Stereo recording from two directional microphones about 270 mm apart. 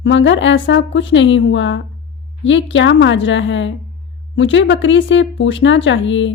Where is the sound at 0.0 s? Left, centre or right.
Left.